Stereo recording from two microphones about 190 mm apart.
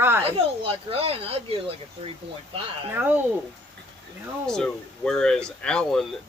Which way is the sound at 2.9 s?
10° right (ahead or behind).